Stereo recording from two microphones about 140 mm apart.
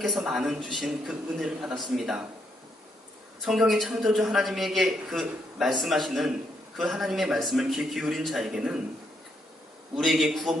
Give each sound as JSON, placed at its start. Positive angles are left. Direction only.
{"t": 0.0, "sound": "a man's voice", "side_deg": 0}
{"t": 3.4, "sound": "a man's voice", "side_deg": 0}
{"t": 10.0, "sound": "a man's voice", "side_deg": 0}